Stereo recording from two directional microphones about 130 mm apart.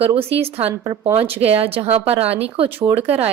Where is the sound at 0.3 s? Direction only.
50° right (ahead or behind).